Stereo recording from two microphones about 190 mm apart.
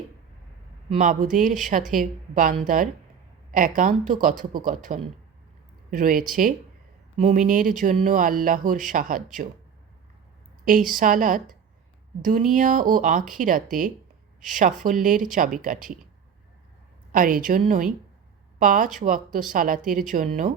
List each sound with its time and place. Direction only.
0.9 s speech: 45° right (ahead or behind)
10.7 s speech: 45° right (ahead or behind)
17.1 s speech: 45° right (ahead or behind)